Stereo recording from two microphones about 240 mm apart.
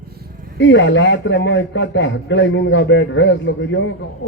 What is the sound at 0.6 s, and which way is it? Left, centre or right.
A man's voice, left.